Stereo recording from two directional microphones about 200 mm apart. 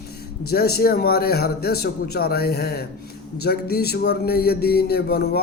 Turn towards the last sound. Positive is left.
turn(degrees=55)  # may be behind; listen again after turning